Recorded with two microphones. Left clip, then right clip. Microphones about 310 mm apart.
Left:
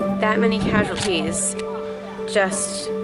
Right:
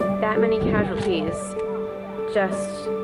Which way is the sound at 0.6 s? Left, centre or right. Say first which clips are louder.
Left 2 dB; centre.